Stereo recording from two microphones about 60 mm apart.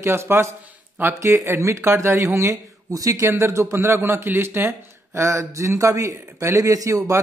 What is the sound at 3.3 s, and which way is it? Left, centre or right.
Speech, right.